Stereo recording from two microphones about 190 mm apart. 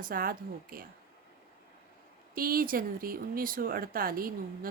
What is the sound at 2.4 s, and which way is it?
Speech, 50° right (ahead or behind).